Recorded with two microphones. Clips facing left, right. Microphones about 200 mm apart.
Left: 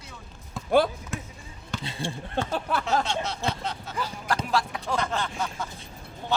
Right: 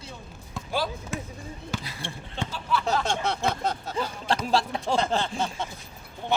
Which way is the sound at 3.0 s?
55° right (ahead or behind).